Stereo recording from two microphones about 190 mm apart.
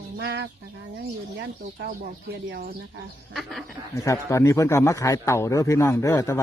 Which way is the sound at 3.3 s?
Centre (ahead or behind).